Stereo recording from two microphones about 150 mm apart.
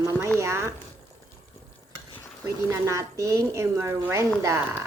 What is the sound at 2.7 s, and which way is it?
Speech, 20° right (ahead or behind).